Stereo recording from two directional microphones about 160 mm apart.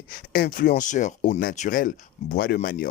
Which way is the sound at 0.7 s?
50° left (ahead or behind).